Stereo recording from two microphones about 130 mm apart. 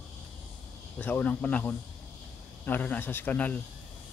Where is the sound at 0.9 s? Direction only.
10° left (ahead or behind).